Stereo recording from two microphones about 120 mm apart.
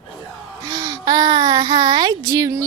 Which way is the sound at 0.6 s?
30° right (ahead or behind).